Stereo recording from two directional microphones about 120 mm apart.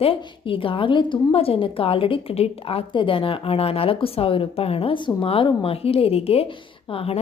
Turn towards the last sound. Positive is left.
turn(degrees=50)  # may be behind; listen again after turning